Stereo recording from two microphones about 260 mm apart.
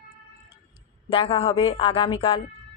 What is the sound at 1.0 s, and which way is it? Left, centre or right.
Speech, centre.